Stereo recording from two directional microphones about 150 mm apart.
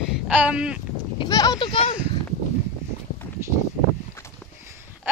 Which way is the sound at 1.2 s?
25° left (ahead or behind).